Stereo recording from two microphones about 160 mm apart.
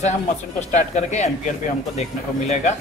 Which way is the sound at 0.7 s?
50° left (ahead or behind).